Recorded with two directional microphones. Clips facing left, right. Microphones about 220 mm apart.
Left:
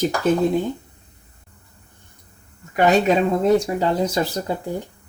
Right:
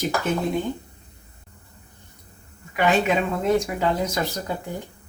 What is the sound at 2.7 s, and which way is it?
Speech, 40° left (ahead or behind).